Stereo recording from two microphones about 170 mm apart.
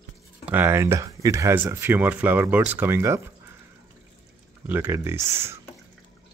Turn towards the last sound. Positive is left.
turn(degrees=-15)  # may be behind; listen again after turning